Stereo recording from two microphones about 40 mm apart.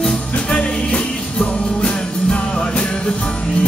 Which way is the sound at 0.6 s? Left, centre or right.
Left.